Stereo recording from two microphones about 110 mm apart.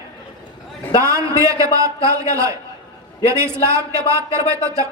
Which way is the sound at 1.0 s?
30° right (ahead or behind).